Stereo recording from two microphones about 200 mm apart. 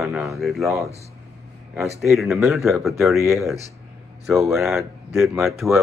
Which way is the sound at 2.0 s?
Centre (ahead or behind).